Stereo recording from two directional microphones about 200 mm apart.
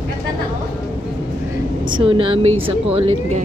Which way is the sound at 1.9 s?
25° right (ahead or behind).